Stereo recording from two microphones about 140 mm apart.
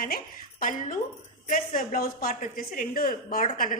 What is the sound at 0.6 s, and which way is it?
Speech, 70° left (ahead or behind).